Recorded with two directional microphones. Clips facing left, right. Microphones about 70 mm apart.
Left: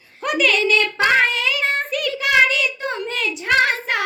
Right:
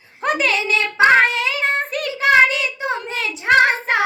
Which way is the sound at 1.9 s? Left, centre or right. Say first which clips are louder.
Right 4 dB; right.